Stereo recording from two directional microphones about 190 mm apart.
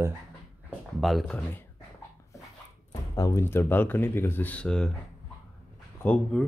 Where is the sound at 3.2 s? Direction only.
15° left (ahead or behind).